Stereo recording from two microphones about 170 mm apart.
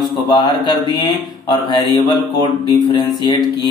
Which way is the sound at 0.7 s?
25° left (ahead or behind).